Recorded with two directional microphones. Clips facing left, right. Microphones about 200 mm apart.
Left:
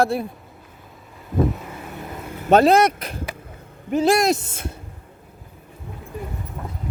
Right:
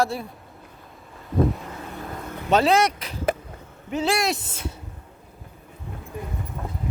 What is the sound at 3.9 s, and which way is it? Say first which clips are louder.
Speech: left 6 dB; 40° left (ahead or behind).